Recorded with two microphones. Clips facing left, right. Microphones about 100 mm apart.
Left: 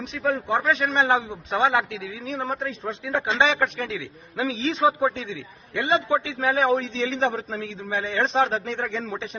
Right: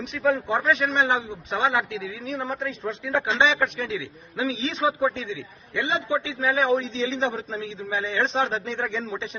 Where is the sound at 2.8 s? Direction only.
20° left (ahead or behind).